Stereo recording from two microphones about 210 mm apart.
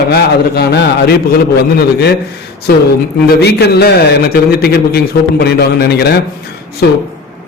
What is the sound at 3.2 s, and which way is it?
A man's voice, 50° left (ahead or behind).